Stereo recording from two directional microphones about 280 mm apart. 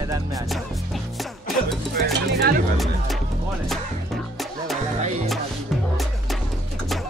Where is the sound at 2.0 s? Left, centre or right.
Right.